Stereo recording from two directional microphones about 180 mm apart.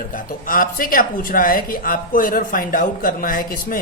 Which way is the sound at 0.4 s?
50° left (ahead or behind).